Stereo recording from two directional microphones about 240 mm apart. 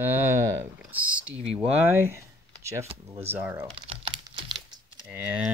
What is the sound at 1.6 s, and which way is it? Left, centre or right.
Speech, centre.